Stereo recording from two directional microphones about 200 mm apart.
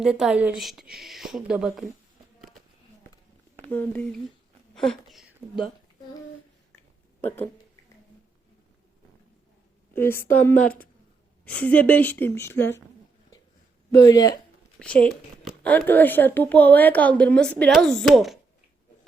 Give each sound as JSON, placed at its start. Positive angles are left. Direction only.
{"t": 0.0, "sound": "speech", "side_deg": -5}
{"t": 3.7, "sound": "a child's voice", "side_deg": 10}
{"t": 9.9, "sound": "a woman's voice", "side_deg": 10}
{"t": 14.0, "sound": "a child's voice", "side_deg": 15}
{"t": 14.8, "sound": "a child's voice", "side_deg": 5}